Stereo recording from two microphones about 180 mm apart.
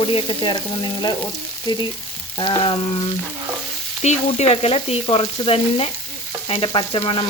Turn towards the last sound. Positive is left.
turn(degrees=30)  # may be behind; listen again after turning